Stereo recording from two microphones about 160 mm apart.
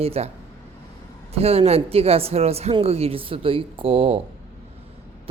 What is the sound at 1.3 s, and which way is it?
Speech, 40° right (ahead or behind).